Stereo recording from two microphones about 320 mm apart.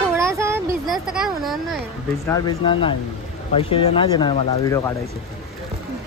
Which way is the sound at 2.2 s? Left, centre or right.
Centre.